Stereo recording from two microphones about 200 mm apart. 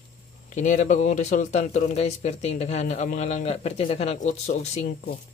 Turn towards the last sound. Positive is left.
turn(degrees=40)  # may be behind; listen again after turning